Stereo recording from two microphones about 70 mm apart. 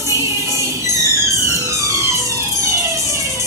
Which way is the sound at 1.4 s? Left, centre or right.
Right.